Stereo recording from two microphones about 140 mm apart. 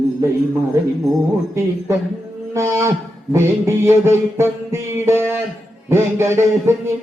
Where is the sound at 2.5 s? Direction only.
20° right (ahead or behind).